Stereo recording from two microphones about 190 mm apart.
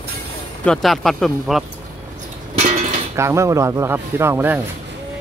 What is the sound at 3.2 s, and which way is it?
Speech, 15° right (ahead or behind).